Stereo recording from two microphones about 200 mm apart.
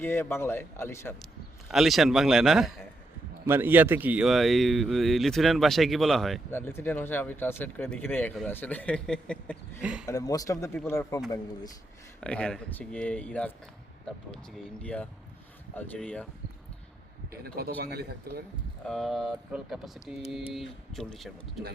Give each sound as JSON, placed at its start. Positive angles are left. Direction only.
{"t": 0.0, "sound": "speech", "side_deg": 10}
{"t": 1.2, "sound": "speech", "side_deg": 0}
{"t": 9.8, "sound": "speech", "side_deg": -5}
{"t": 10.1, "sound": "speech", "side_deg": 15}
{"t": 12.2, "sound": "speech", "side_deg": 5}
{"t": 17.4, "sound": "a man's voice", "side_deg": -50}
{"t": 18.9, "sound": "speech", "side_deg": 0}